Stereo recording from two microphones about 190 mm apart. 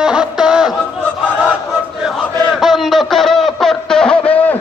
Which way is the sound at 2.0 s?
Centre (ahead or behind).